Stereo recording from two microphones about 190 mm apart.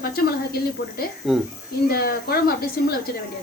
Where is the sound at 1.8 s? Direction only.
50° left (ahead or behind).